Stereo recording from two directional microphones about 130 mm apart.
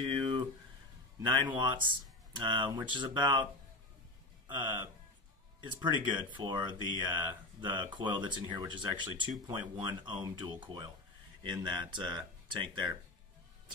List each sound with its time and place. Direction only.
0.0 s a sound: 40° right (ahead or behind)
1.2 s speech: 35° right (ahead or behind)
5.8 s speech: 35° right (ahead or behind)